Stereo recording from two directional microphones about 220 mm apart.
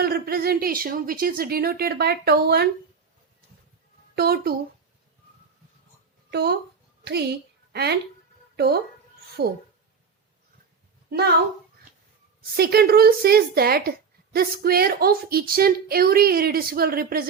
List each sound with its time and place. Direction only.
0.0 s speech: 45° right (ahead or behind)
4.1 s speech: 45° right (ahead or behind)
6.3 s a woman's voice: 45° right (ahead or behind)
12.4 s speech: 45° right (ahead or behind)